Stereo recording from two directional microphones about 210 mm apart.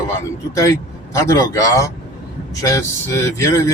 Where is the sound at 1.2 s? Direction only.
15° left (ahead or behind).